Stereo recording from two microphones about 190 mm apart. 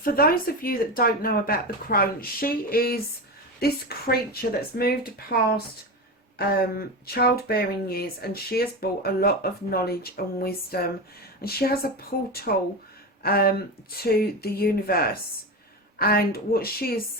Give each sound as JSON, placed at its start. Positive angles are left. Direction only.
{"t": 0.0, "sound": "speech", "side_deg": 50}
{"t": 11.8, "sound": "speech", "side_deg": 50}